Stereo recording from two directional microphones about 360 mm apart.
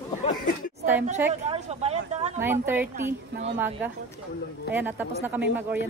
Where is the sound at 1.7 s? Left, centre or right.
Centre.